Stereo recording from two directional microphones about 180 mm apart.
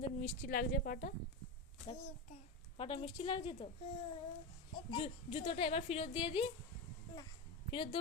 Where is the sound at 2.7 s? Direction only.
30° left (ahead or behind).